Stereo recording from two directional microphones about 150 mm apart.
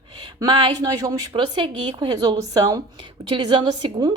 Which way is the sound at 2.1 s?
25° right (ahead or behind).